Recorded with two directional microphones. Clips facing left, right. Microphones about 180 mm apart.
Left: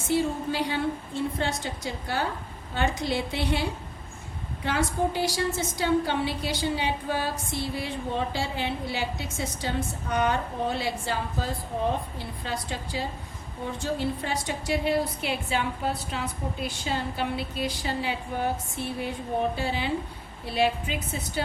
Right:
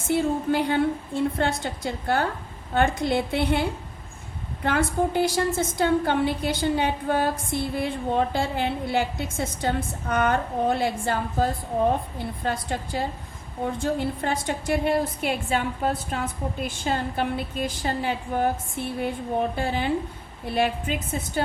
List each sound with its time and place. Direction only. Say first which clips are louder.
0.0 s a woman's voice: right 2 dB; 55° right (ahead or behind)
19.5 s a woman's voice: right 3 dB; 50° right (ahead or behind)